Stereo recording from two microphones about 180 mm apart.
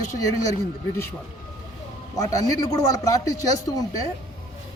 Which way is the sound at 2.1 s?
20° left (ahead or behind).